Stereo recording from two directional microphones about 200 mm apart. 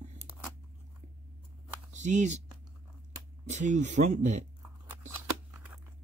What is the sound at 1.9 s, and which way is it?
Speech, 35° right (ahead or behind).